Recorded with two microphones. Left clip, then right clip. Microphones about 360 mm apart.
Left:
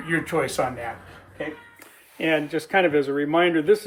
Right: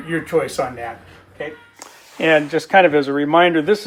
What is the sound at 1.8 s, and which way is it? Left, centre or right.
Speech, centre.